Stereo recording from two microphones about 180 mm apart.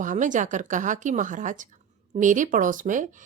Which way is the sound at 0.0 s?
45° right (ahead or behind).